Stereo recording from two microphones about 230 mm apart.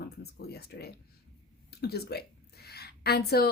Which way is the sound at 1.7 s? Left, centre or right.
Left.